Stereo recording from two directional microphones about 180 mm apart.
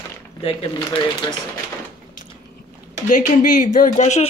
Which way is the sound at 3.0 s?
45° left (ahead or behind).